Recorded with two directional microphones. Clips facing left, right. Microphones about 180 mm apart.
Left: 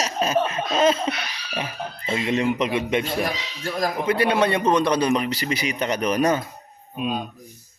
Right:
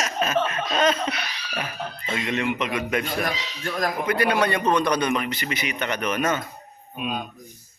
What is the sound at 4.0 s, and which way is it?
A man's voice, 25° left (ahead or behind).